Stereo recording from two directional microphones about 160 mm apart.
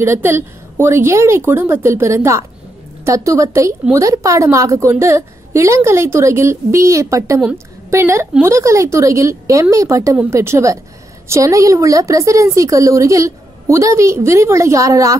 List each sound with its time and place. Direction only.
0.0 s a woman's voice: 15° right (ahead or behind)